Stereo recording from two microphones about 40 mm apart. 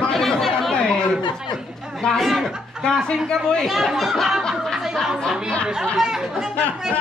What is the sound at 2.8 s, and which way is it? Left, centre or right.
Speech, left.